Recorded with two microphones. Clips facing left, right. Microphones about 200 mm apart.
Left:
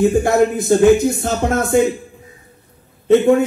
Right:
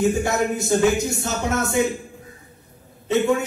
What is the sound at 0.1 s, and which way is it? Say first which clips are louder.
Speech: left 7 dB; 55° left (ahead or behind).